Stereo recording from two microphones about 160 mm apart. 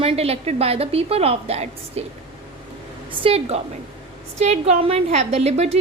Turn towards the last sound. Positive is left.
turn(degrees=-40)  # may be behind; listen again after turning